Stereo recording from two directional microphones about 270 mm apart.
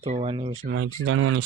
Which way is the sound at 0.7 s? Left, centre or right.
Right.